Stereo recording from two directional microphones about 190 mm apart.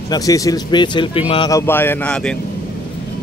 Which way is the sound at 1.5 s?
15° left (ahead or behind).